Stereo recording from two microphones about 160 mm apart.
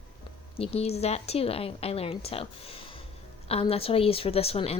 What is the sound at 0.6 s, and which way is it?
A woman's voice, 40° left (ahead or behind).